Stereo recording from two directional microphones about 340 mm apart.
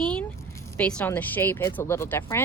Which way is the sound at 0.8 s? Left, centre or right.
Centre.